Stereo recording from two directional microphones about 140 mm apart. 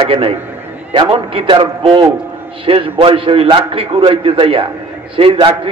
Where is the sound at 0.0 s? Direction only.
40° right (ahead or behind).